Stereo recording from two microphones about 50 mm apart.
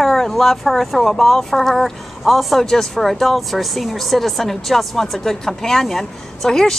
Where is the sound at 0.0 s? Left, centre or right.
Centre.